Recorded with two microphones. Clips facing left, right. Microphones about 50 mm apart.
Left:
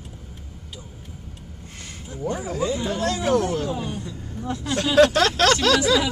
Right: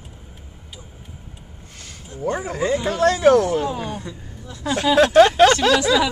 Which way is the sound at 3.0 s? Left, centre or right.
Right.